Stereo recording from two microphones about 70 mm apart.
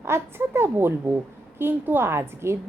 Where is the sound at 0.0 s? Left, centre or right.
Right.